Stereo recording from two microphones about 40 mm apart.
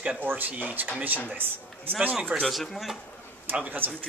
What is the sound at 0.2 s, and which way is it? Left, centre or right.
Speech, right.